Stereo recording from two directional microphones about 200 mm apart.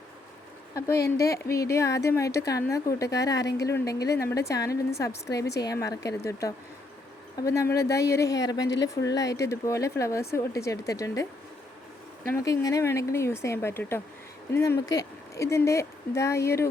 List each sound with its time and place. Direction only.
0.9 s speech: 55° left (ahead or behind)
1.2 s a woman's voice: 15° left (ahead or behind)